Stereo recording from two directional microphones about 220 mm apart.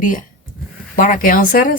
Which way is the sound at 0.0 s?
35° left (ahead or behind).